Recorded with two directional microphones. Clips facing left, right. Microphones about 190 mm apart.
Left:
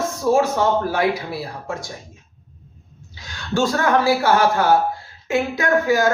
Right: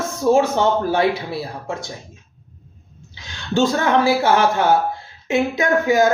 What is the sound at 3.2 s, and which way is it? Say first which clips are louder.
Speech: right 2 dB; 20° right (ahead or behind).